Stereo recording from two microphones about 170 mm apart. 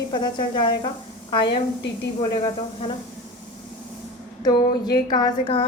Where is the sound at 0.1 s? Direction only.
25° left (ahead or behind).